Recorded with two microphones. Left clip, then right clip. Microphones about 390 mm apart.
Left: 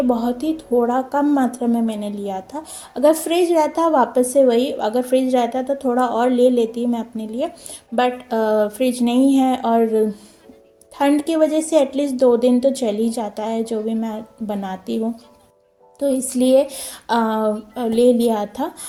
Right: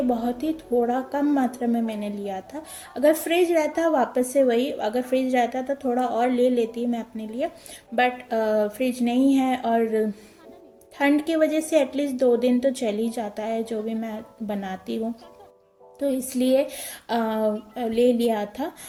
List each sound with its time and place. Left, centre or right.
0.1 s a woman's voice: right